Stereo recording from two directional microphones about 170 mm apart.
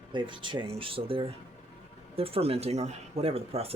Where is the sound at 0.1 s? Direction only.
30° right (ahead or behind).